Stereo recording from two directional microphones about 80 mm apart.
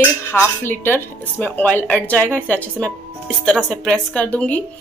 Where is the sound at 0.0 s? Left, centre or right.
Left.